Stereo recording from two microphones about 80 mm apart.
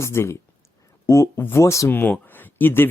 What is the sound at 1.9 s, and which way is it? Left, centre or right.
Speech, left.